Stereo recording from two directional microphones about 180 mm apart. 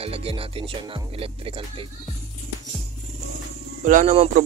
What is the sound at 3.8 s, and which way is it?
Speech, 45° right (ahead or behind).